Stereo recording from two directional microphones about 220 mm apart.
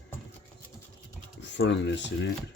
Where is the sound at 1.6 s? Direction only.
55° left (ahead or behind).